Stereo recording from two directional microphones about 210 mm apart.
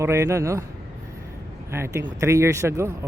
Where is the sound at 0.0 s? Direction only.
15° right (ahead or behind).